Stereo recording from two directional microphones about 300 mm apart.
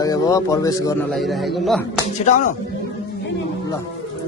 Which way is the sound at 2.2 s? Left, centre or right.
Left.